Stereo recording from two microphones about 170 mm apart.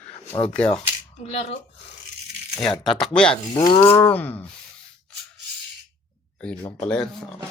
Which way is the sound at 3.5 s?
30° left (ahead or behind).